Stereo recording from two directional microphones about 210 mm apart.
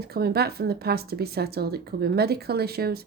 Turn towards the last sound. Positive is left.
turn(degrees=-50)  # may be behind; listen again after turning